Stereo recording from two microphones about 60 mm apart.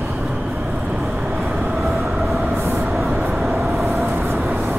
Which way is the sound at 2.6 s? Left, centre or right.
Right.